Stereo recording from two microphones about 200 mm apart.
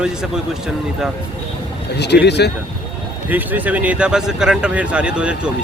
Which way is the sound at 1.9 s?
55° left (ahead or behind).